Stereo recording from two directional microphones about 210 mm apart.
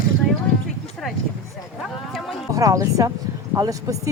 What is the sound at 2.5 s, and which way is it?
Speech, 15° right (ahead or behind).